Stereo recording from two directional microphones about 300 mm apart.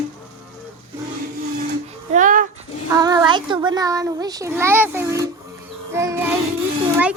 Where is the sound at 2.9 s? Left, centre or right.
Centre.